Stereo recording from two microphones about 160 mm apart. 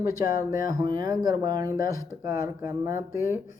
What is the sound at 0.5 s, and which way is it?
Speech, 20° right (ahead or behind).